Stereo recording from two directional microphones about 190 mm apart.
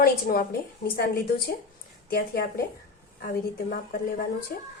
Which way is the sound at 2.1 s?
55° left (ahead or behind).